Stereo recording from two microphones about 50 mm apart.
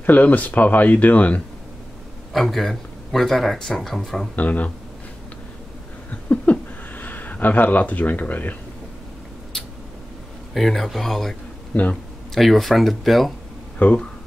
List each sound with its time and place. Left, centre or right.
0.0 s speech: left
2.3 s speech: centre
4.4 s speech: left
6.2 s a sound: left
10.5 s speech: centre
11.7 s speech: left
12.4 s speech: centre
13.7 s speech: left